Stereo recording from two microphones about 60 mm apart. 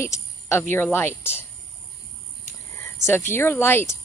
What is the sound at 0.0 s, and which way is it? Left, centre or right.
Cricket, left.